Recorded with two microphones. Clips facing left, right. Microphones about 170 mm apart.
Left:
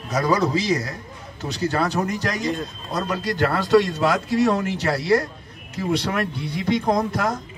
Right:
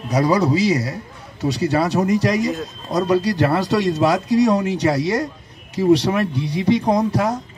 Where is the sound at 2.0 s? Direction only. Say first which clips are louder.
Right 5 dB; 10° right (ahead or behind).